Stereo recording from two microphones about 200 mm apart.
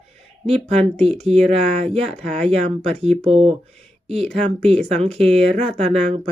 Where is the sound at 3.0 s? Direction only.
30° right (ahead or behind).